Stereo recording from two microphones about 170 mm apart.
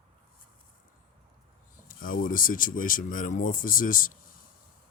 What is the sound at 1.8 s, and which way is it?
Speech, 55° left (ahead or behind).